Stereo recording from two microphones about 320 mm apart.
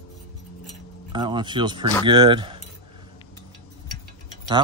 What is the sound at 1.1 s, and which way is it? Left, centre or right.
Speech, centre.